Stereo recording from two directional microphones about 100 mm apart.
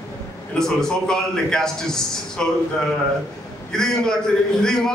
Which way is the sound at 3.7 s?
5° left (ahead or behind).